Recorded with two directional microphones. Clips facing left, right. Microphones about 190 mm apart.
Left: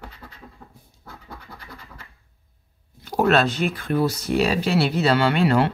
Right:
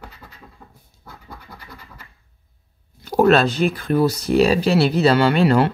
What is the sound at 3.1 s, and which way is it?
Speech, 40° right (ahead or behind).